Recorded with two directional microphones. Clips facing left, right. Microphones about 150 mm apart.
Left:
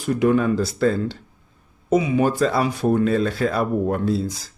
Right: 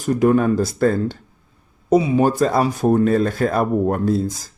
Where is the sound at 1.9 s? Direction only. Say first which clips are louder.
Right 3 dB; 35° right (ahead or behind).